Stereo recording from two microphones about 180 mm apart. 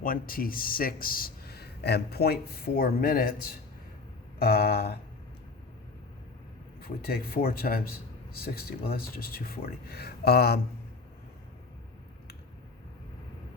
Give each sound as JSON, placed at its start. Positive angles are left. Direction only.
{"t": 0.0, "sound": "speech", "side_deg": 50}
{"t": 4.4, "sound": "speech", "side_deg": 60}
{"t": 6.8, "sound": "speech", "side_deg": 55}